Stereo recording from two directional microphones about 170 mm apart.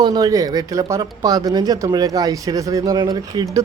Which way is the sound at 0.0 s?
25° right (ahead or behind).